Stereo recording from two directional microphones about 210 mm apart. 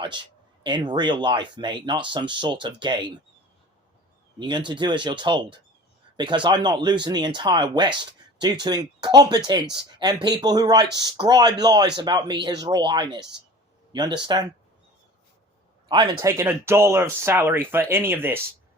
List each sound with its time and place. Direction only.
0.6 s speech: 20° right (ahead or behind)
4.4 s speech: 20° right (ahead or behind)
7.9 s a sound: 20° right (ahead or behind)
8.6 s speech: 20° right (ahead or behind)
15.9 s speech: 20° right (ahead or behind)